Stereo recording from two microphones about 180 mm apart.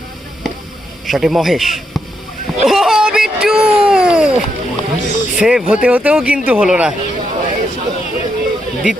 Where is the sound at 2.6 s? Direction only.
Centre (ahead or behind).